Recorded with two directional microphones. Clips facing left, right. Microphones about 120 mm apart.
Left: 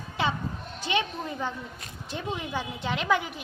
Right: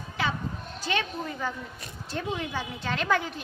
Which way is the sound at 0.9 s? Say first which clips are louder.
Left 1 dB; 20° left (ahead or behind).